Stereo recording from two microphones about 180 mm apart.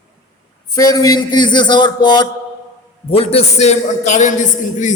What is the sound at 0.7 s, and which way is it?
A man's voice, 20° left (ahead or behind).